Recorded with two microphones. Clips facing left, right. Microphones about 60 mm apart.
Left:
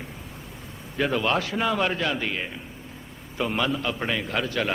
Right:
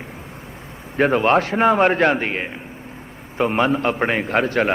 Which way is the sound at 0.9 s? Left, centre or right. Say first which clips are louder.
Right 8 dB; right.